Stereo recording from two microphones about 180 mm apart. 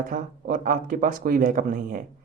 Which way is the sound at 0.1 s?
50° right (ahead or behind).